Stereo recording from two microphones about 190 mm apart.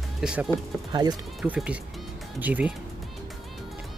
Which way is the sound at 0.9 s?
20° right (ahead or behind).